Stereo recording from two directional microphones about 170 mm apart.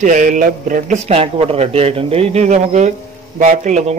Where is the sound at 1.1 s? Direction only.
35° right (ahead or behind).